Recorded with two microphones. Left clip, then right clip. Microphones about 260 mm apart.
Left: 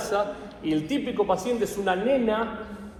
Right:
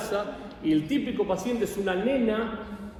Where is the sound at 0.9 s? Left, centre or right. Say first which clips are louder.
Left 3 dB; centre.